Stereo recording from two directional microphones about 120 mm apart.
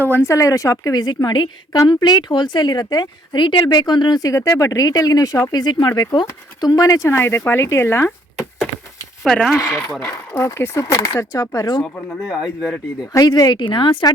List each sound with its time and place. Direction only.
0.0 s a woman's voice: 20° left (ahead or behind)
9.2 s speech: 5° left (ahead or behind)
10.0 s a woman's voice: 25° left (ahead or behind)
12.2 s speech: 5° right (ahead or behind)
13.1 s speech: 30° left (ahead or behind)